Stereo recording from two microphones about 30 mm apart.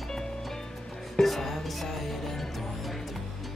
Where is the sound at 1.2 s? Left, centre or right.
Centre.